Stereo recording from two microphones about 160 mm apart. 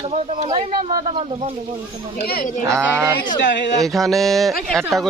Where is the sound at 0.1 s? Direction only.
45° right (ahead or behind).